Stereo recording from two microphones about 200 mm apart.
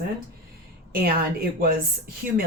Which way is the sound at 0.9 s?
50° right (ahead or behind).